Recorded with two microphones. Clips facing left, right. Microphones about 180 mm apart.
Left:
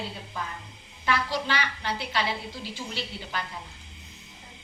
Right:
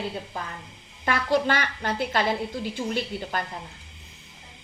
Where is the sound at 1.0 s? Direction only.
50° right (ahead or behind).